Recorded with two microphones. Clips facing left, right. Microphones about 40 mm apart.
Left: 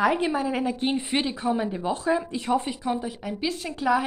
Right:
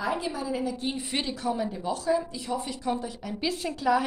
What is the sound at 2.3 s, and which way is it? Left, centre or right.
Speech, left.